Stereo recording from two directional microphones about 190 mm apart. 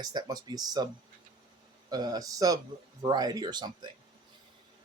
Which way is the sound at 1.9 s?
20° right (ahead or behind).